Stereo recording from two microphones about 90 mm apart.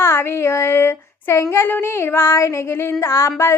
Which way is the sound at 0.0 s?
25° left (ahead or behind).